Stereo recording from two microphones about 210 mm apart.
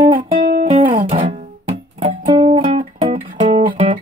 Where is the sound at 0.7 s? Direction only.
35° right (ahead or behind).